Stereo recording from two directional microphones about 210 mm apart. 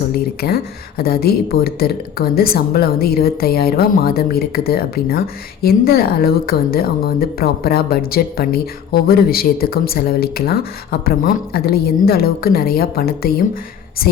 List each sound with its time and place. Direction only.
0.4 s speech: 50° left (ahead or behind)